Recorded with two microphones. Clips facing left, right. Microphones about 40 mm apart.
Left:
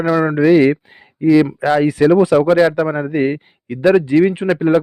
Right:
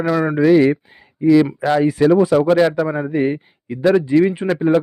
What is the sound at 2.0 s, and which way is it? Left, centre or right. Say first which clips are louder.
Speech: left 2 dB; left.